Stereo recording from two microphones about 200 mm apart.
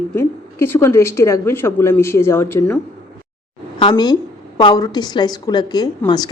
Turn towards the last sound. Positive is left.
turn(degrees=20)  # may be behind; listen again after turning